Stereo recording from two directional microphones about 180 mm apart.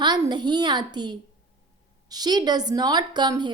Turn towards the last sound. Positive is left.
turn(degrees=-25)  # may be behind; listen again after turning